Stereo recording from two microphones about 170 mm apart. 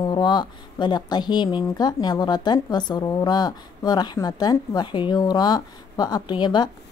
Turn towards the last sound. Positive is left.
turn(degrees=25)  # may be behind; listen again after turning